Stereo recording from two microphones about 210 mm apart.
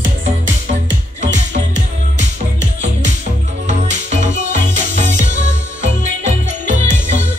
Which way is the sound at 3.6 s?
35° right (ahead or behind).